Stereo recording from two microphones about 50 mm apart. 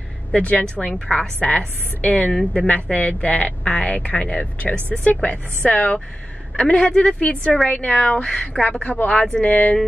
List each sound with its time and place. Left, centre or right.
0.3 s speech: left
0.9 s a woman's voice: centre
1.4 s speech: left